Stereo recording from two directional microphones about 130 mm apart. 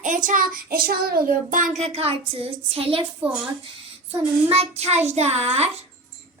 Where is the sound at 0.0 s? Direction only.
85° right; by 3.0 s 45° right (ahead or behind).